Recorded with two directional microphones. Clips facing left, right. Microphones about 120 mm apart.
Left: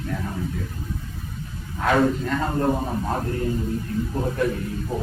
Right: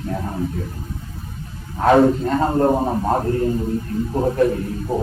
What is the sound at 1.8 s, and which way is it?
A man's voice, 35° right (ahead or behind).